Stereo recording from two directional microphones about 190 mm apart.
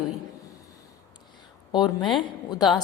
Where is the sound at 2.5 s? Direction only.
20° left (ahead or behind).